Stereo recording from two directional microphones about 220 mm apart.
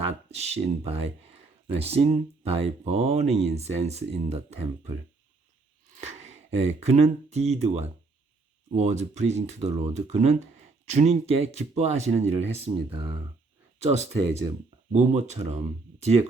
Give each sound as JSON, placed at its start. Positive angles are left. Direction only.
{"t": 0.3, "sound": "speech", "side_deg": -30}
{"t": 6.0, "sound": "speech", "side_deg": -30}